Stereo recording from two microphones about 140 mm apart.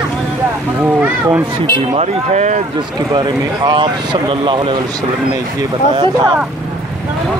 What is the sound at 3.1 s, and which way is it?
Speech, 30° right (ahead or behind).